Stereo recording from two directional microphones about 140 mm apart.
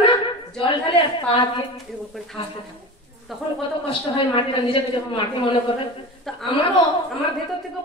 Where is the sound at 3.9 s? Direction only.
40° left (ahead or behind).